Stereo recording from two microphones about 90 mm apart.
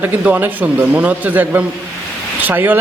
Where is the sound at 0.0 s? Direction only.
20° right (ahead or behind).